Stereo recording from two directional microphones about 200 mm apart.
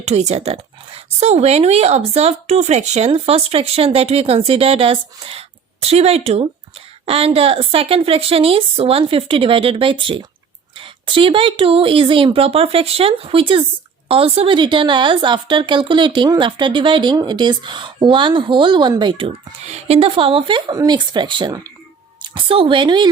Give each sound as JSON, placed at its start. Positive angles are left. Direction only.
{"t": 0.0, "sound": "a woman's voice", "side_deg": -35}